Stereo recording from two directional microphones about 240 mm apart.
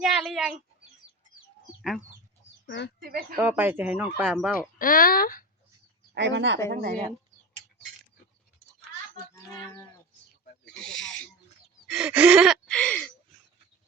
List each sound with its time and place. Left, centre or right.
0.0 s a sound: centre
1.8 s speech: centre
2.6 s speech: left
3.0 s speech: right
3.3 s speech: centre
4.8 s speech: left
6.1 s speech: right
6.7 s speech: right
10.7 s speech: centre
10.9 s a sound: left
11.9 s gasp: centre